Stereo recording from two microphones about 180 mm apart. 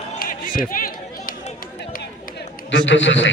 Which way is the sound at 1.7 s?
60° left (ahead or behind).